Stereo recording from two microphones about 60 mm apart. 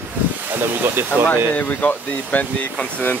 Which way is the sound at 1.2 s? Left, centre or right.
Left.